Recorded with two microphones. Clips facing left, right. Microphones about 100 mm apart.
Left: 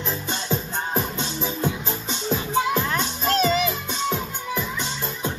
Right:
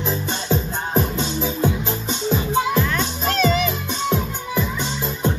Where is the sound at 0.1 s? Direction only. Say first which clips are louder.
Right 4 dB; 5° right (ahead or behind).